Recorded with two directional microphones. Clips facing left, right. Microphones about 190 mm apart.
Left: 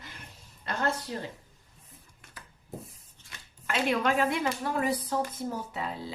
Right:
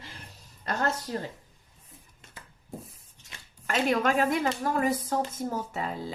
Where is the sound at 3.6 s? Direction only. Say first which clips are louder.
Right 2 dB; 45° right (ahead or behind).